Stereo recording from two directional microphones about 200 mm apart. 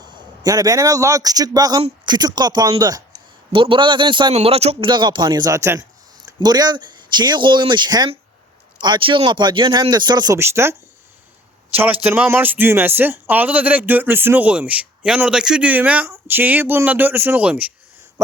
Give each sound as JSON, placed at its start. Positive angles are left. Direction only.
{"t": 0.0, "sound": "a man's voice", "side_deg": -20}